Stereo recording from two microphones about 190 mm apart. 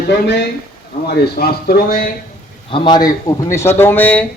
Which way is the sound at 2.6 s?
25° left (ahead or behind).